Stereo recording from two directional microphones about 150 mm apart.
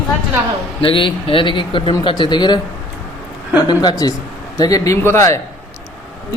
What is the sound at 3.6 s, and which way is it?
Speech, 30° left (ahead or behind).